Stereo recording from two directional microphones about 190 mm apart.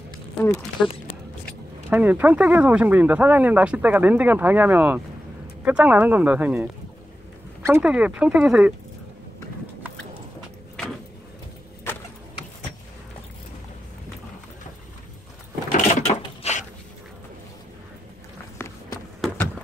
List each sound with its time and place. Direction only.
0.8 s speech: centre (ahead or behind)
1.9 s speech: 10° right (ahead or behind)
15.7 s a sound: 35° left (ahead or behind)